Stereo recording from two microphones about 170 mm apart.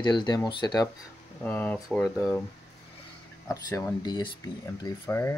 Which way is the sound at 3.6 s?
20° left (ahead or behind).